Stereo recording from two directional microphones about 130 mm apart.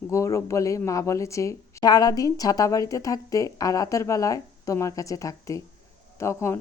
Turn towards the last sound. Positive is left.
turn(degrees=20)  # may be behind; listen again after turning